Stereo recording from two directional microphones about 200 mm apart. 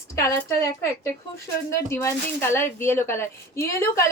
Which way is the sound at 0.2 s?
15° left (ahead or behind).